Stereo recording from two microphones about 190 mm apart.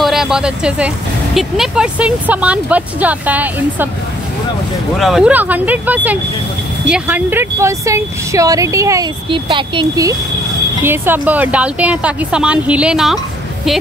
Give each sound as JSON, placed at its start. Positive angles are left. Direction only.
{"t": 0.0, "sound": "speech", "side_deg": 0}
{"t": 4.9, "sound": "speech", "side_deg": 0}
{"t": 10.8, "sound": "speech", "side_deg": -10}